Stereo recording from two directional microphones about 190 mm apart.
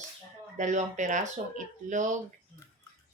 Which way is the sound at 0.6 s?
40° right (ahead or behind).